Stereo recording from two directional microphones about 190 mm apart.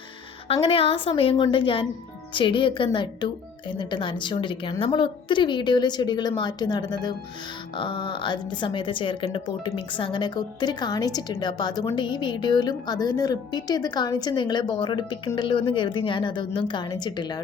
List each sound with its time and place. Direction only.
0.4 s a woman's voice: 30° left (ahead or behind)